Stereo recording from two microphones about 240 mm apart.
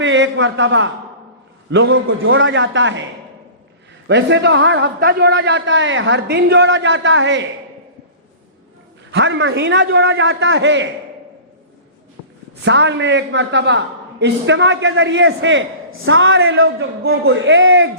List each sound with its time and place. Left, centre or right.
0.0 s a man's voice: right
4.1 s a man's voice: right
9.1 s a man's voice: right
12.6 s a man's voice: right
17.0 s a man's voice: right